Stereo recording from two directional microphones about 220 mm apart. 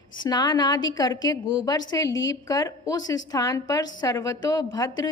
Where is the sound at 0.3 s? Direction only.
20° left (ahead or behind).